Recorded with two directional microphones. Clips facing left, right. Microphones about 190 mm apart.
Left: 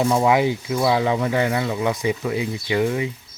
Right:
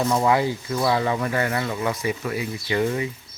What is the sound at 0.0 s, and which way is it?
Speech, 15° left (ahead or behind).